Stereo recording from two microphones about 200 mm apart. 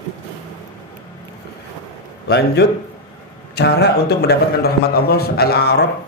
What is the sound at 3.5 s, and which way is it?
A man's voice, 55° left (ahead or behind).